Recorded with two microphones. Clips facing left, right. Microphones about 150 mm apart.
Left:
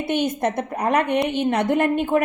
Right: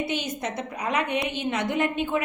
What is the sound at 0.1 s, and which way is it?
A woman's voice, 55° left (ahead or behind).